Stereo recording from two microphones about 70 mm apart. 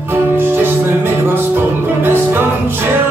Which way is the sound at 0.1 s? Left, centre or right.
Right.